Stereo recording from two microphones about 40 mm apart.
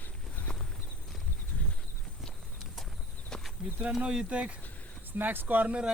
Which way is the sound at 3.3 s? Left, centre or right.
Centre.